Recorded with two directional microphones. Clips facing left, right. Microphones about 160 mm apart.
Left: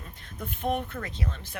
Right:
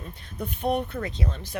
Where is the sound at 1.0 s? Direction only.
30° right (ahead or behind).